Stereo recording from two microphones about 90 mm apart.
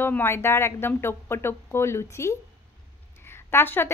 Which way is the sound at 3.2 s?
25° left (ahead or behind).